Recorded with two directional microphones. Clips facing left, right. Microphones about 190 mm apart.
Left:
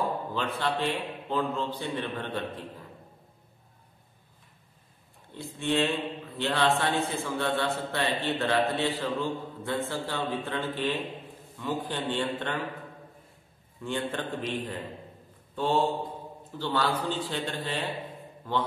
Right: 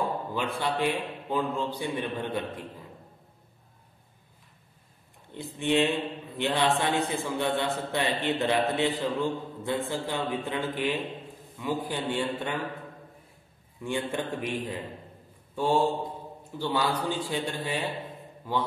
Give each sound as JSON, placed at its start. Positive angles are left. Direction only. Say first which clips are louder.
{"t": 0.3, "sound": "a man's voice", "louder": "even", "side_deg": -10}
{"t": 5.3, "sound": "a man's voice", "louder": "right 2 dB", "side_deg": -15}
{"t": 13.8, "sound": "a man's voice", "louder": "right 1 dB", "side_deg": -10}
{"t": 15.5, "sound": "mantra", "louder": "right 1 dB", "side_deg": -10}
{"t": 16.5, "sound": "a man's voice", "louder": "right 1 dB", "side_deg": -10}